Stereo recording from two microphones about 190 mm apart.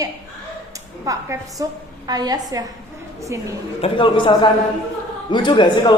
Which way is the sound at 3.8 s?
30° left (ahead or behind).